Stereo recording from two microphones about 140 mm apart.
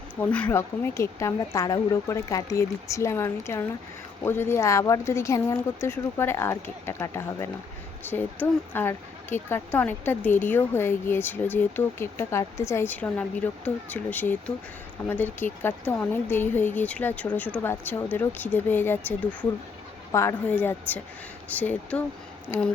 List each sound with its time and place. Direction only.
0.2 s a woman's voice: 10° left (ahead or behind)